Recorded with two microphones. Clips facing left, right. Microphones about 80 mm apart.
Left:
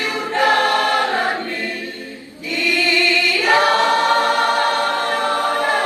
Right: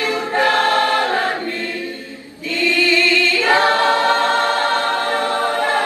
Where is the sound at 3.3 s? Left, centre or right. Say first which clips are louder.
Left 1 dB; right.